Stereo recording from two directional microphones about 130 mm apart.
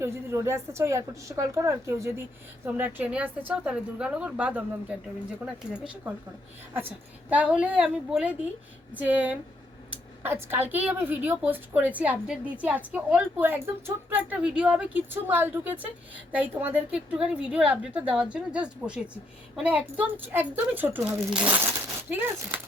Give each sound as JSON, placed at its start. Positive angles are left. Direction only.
{"t": 0.0, "sound": "a woman's voice", "side_deg": -20}
{"t": 6.7, "sound": "a woman's voice", "side_deg": -15}